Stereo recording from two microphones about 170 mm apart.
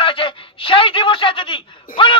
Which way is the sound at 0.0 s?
30° left (ahead or behind).